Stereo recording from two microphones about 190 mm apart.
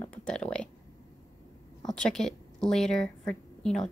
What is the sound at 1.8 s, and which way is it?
A woman's voice, 5° left (ahead or behind).